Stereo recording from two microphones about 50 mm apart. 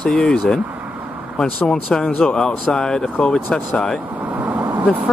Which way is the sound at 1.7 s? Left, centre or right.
Centre.